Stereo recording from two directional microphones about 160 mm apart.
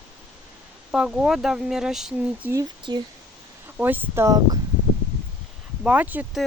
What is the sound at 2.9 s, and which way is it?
Speech, 25° right (ahead or behind).